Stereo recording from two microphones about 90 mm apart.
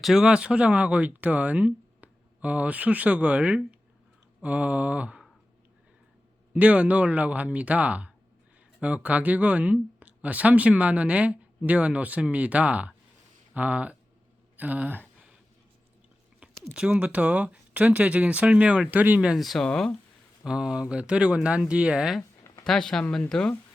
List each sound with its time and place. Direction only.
0.0 s speech: 5° right (ahead or behind)
6.5 s speech: 15° right (ahead or behind)
14.5 s a sound: 20° right (ahead or behind)
16.4 s speech: 10° right (ahead or behind)
19.4 s speech: centre (ahead or behind)
20.4 s speech: 10° right (ahead or behind)
22.6 s speech: 5° left (ahead or behind)